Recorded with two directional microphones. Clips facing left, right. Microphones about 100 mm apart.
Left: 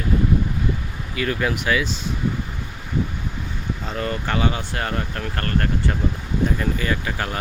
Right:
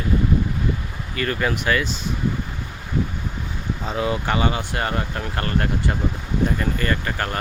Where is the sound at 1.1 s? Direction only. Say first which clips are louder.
Even; 5° left (ahead or behind).